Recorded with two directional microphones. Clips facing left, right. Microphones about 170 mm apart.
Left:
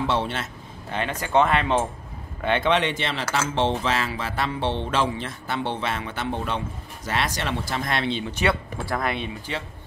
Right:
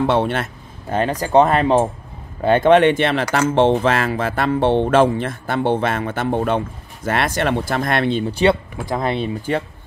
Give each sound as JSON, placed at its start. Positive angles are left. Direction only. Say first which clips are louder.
{"t": 0.0, "sound": "speech", "louder": "right 7 dB", "side_deg": -55}
{"t": 8.3, "sound": "speech", "louder": "right 8 dB", "side_deg": -30}